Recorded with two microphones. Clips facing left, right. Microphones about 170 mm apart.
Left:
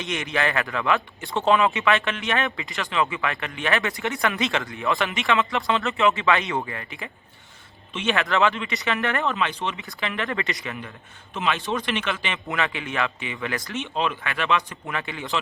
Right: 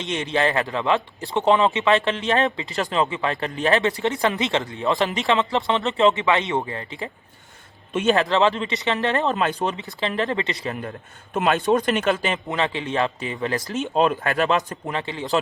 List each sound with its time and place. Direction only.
0.0 s a man's voice: 30° right (ahead or behind)
9.3 s speech: 40° right (ahead or behind); by 10.6 s 25° right (ahead or behind)
10.7 s speech: 45° right (ahead or behind)
12.5 s speech: 30° right (ahead or behind)